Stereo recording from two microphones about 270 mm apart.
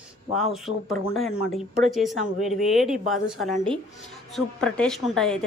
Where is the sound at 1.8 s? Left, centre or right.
Centre.